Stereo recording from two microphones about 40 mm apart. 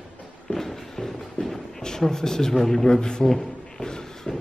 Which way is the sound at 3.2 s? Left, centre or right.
Centre.